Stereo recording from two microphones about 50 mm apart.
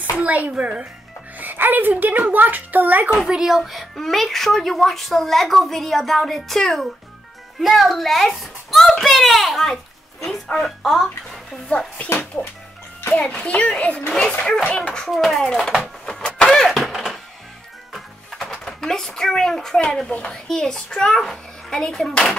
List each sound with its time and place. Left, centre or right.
0.2 s speech: right
1.4 s a woman's voice: right
3.3 s a woman's voice: centre
13.3 s a child's voice: left
15.0 s a woman's voice: centre
15.4 s a child's voice: centre
15.8 s vehicle: centre
16.3 s a sound: centre
18.7 s a child's voice: centre